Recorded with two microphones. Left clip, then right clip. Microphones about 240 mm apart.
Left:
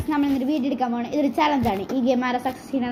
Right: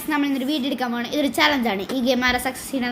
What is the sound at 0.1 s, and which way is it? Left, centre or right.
A woman's voice, right.